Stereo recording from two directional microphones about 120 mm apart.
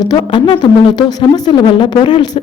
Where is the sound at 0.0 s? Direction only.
35° left (ahead or behind).